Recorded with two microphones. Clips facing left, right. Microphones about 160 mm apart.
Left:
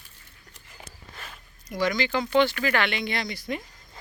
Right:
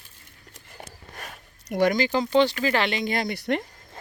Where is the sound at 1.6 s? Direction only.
60° right (ahead or behind).